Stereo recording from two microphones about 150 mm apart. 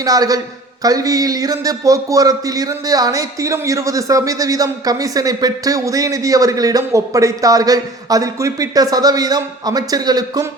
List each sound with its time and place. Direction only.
0.0 s a man's voice: 25° right (ahead or behind)